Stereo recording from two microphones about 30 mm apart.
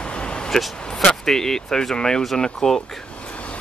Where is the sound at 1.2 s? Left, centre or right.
Centre.